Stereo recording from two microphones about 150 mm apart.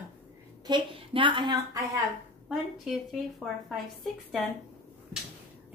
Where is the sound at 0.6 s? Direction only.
35° right (ahead or behind).